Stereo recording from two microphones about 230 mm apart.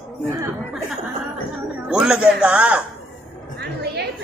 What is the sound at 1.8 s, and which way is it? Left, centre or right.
Speech, centre.